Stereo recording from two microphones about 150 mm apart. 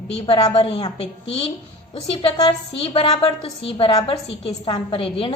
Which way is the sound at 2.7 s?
40° left (ahead or behind).